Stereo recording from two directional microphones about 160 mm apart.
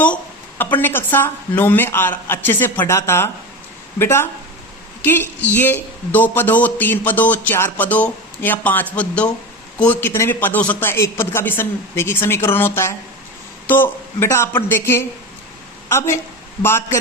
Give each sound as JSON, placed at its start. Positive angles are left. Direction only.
{"t": 0.6, "sound": "speech", "side_deg": 10}